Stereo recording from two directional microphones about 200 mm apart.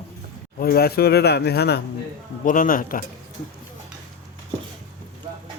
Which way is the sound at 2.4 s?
40° left (ahead or behind).